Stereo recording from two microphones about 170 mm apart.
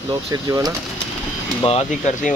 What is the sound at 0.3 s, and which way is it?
Speech, 20° right (ahead or behind).